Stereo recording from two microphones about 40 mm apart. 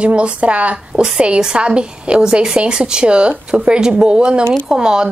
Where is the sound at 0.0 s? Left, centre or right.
Right.